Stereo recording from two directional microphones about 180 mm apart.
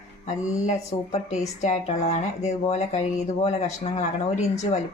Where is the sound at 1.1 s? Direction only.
40° left (ahead or behind).